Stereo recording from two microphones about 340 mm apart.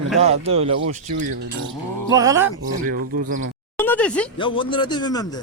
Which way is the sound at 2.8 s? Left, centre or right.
Right.